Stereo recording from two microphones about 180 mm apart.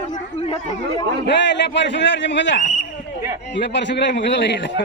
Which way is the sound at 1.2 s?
80° left.